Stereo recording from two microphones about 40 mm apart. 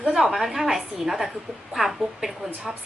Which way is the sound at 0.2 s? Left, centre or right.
Centre.